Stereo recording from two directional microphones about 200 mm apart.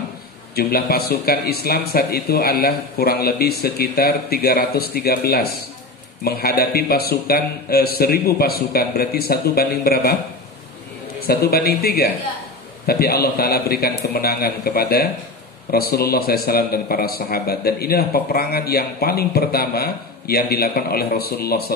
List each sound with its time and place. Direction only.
0.6 s a man's voice: 50° left (ahead or behind)
11.2 s a man's voice: 50° left (ahead or behind)